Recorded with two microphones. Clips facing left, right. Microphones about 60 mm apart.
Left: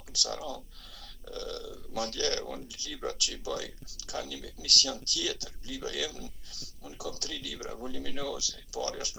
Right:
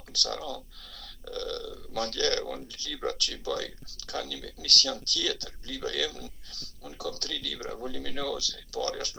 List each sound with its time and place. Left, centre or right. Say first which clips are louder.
0.1 s speech: right 2 dB; right